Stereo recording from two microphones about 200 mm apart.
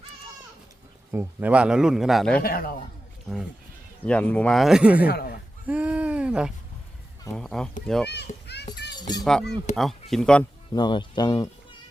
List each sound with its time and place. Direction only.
1.1 s a man's voice: 10° right (ahead or behind)
2.4 s a man's voice: 50° left (ahead or behind)
3.3 s a man's voice: centre (ahead or behind)
5.0 s a man's voice: 50° left (ahead or behind)
5.6 s a sound: 5° right (ahead or behind)
7.3 s a man's voice: 5° left (ahead or behind)
8.3 s a child's voice: 40° left (ahead or behind)
9.0 s speech: 20° left (ahead or behind)
9.2 s a man's voice: 5° left (ahead or behind)
10.8 s speech: 20° left (ahead or behind)